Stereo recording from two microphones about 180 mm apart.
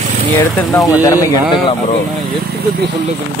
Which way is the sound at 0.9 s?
20° left (ahead or behind).